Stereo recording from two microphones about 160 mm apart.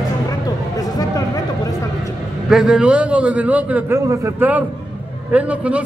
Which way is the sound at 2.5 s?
5° right (ahead or behind).